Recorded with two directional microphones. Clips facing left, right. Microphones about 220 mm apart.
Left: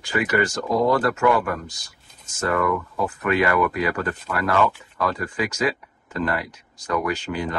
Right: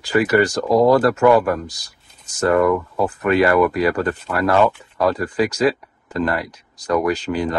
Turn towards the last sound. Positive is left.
turn(degrees=-35)  # may be behind; listen again after turning